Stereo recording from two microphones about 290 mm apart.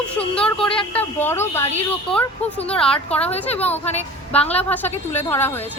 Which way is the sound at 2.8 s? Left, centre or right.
Centre.